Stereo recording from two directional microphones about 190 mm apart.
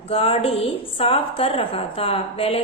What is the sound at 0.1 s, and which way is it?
A woman's voice, 30° left (ahead or behind).